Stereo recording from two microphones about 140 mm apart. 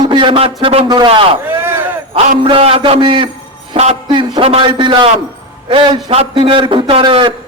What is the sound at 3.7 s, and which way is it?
Jingle bell, 50° right (ahead or behind).